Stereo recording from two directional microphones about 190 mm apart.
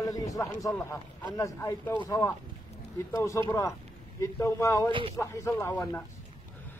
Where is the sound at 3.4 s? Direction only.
15° left (ahead or behind).